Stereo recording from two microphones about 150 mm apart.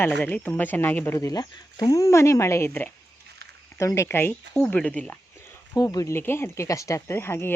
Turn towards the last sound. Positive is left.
turn(degrees=15)  # may be behind; listen again after turning